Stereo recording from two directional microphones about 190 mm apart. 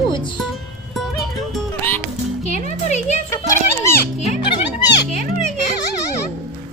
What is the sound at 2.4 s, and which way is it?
Music, 35° left (ahead or behind).